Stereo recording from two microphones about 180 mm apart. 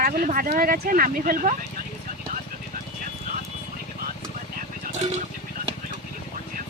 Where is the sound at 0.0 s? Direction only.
55° right (ahead or behind).